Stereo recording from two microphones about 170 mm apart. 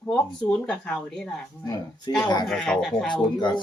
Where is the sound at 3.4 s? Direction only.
25° left (ahead or behind).